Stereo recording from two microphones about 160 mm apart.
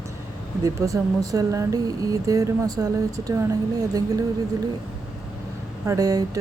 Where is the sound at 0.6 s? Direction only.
20° right (ahead or behind).